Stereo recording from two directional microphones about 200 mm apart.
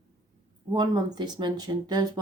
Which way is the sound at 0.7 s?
20° right (ahead or behind).